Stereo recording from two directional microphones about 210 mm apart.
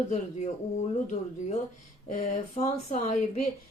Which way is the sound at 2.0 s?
40° left (ahead or behind).